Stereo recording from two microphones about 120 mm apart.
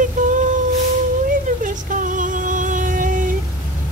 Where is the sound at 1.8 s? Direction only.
90° right.